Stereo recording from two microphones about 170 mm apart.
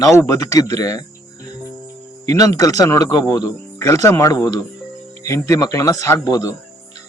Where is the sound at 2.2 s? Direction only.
20° left (ahead or behind).